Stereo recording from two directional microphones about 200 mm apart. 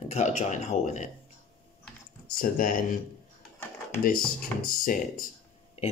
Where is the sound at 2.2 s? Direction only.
45° left (ahead or behind).